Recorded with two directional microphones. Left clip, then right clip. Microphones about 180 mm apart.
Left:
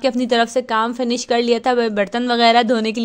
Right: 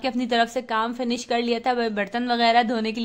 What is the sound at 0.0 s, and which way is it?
A woman's voice, 30° left (ahead or behind).